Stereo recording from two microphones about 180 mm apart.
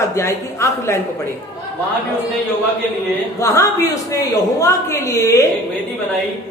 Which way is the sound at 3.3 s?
15° left (ahead or behind).